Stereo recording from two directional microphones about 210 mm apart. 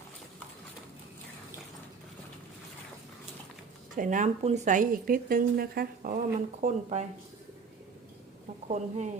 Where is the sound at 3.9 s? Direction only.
40° right (ahead or behind).